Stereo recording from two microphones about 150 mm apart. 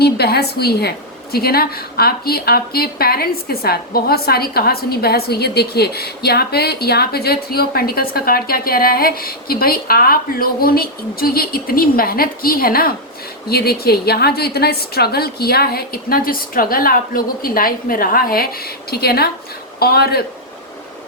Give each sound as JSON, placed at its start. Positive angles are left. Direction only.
{"t": 0.0, "sound": "a woman's voice", "side_deg": 90}
{"t": 13.5, "sound": "a woman's voice", "side_deg": 90}